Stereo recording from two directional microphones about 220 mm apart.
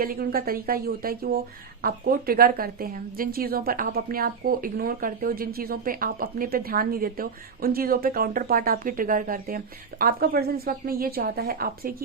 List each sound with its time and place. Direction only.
0.0 s a woman's voice: 40° right (ahead or behind)